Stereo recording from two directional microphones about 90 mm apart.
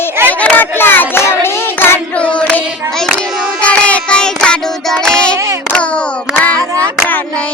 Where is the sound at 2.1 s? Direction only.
15° left (ahead or behind).